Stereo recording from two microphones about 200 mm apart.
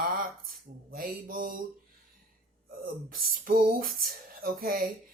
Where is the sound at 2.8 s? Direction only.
45° right (ahead or behind).